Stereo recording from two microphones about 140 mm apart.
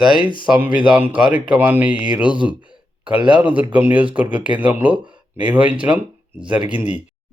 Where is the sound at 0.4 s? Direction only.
10° right (ahead or behind).